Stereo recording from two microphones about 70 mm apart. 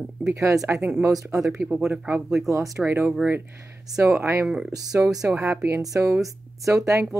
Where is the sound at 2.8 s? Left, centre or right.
Right.